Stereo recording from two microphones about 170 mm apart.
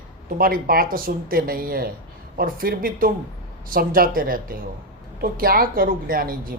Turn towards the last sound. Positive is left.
turn(degrees=-60)  # may be behind; listen again after turning